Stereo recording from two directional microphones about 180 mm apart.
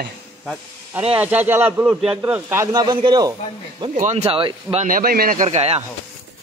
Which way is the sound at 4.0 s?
40° right (ahead or behind).